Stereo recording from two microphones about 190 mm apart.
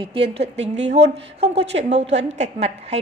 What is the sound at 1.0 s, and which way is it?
Speech, 60° right (ahead or behind).